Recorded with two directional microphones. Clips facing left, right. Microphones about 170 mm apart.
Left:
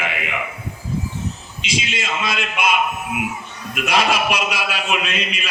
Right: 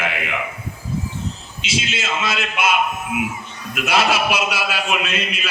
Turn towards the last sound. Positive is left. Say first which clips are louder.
# even
turn(degrees=-5)  # may be behind; listen again after turning